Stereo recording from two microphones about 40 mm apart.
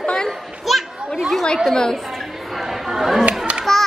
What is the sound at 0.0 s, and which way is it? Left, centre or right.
Children playing, left.